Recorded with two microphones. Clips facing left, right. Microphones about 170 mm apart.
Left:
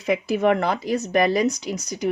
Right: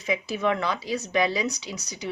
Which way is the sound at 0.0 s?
60° left (ahead or behind).